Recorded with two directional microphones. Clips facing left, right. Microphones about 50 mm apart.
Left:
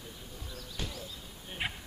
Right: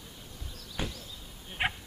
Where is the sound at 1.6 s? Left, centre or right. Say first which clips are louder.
Right 6 dB; right.